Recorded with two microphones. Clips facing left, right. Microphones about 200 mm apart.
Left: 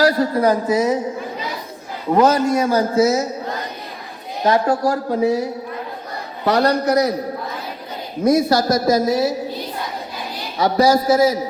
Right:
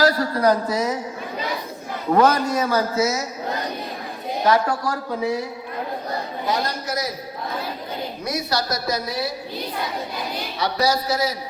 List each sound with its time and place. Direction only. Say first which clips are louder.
0.1 s a man's voice: left 3 dB; 20° left (ahead or behind)
2.1 s a man's voice: left 3 dB; 20° left (ahead or behind)
4.4 s a man's voice: left 2 dB; 25° left (ahead or behind)
4.7 s a man's voice: left 7 dB; 40° left (ahead or behind)
6.4 s a man's voice: left 11 dB; 65° left (ahead or behind)
8.2 s a woman's voice: left 12 dB; 50° left (ahead or behind)
10.6 s a woman's voice: left 7 dB; 45° left (ahead or behind)